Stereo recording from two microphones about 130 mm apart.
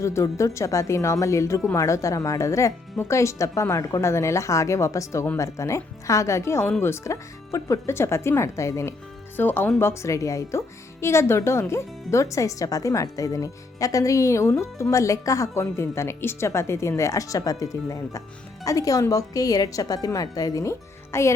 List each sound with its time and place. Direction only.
0.0 s speech: 25° left (ahead or behind)